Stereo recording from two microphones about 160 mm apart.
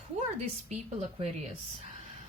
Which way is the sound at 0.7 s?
45° right (ahead or behind).